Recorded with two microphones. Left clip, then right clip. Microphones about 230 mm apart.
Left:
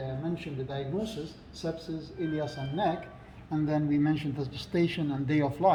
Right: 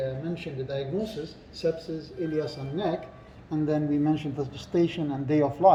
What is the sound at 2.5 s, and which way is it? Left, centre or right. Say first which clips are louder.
Speech: even; centre.